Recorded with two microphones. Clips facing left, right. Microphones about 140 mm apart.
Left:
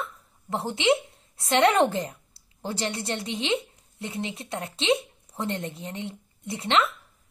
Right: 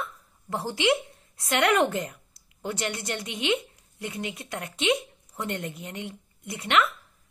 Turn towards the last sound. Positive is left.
turn(degrees=30)  # may be behind; listen again after turning